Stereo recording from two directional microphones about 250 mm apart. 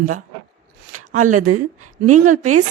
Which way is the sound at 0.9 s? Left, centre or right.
Right.